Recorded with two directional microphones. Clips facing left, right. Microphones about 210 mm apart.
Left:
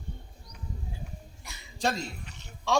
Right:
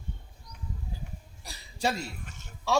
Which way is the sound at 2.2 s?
50° right (ahead or behind).